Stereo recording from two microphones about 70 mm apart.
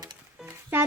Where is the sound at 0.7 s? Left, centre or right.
Right.